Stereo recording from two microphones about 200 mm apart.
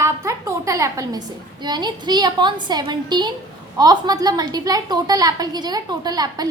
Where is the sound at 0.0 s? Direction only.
15° right (ahead or behind).